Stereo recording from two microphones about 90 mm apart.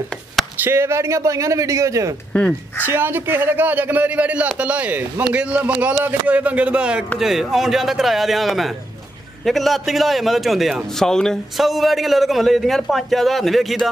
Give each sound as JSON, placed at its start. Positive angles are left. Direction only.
{"t": 0.6, "sound": "speech", "side_deg": -30}
{"t": 2.8, "sound": "a man's voice", "side_deg": -25}